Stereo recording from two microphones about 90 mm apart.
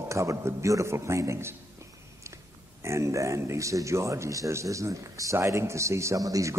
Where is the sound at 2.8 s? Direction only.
35° right (ahead or behind).